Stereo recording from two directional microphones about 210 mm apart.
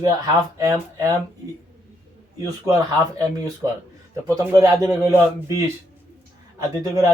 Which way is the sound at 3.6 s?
10° right (ahead or behind).